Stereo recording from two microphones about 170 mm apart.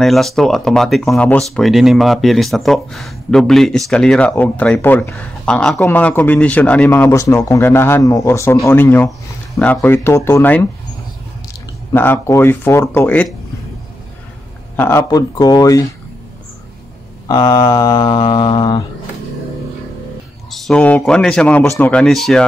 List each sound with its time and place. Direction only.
0.0 s a man's voice: centre (ahead or behind)
11.9 s a man's voice: 15° left (ahead or behind)
14.8 s mantra: 15° left (ahead or behind)
17.3 s mantra: 20° left (ahead or behind)
20.5 s speech: 5° left (ahead or behind)